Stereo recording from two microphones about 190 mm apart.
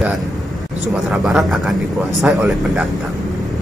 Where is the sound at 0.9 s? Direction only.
Centre (ahead or behind).